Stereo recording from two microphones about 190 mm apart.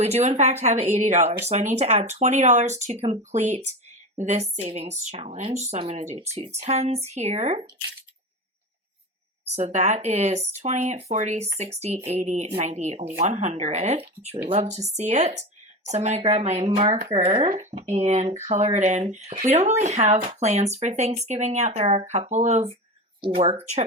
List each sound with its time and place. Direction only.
0.0 s speech: 35° right (ahead or behind)
9.5 s speech: 35° right (ahead or behind)